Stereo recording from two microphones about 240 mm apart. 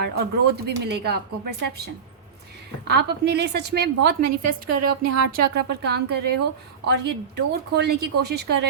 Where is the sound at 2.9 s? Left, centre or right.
Right.